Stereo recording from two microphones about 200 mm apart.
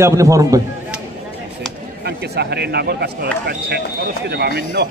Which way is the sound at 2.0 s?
55° right (ahead or behind).